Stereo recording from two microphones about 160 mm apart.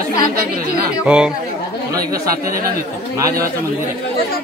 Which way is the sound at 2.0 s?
65° right (ahead or behind).